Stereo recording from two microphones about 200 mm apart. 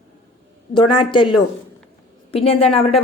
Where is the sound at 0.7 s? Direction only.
25° left (ahead or behind).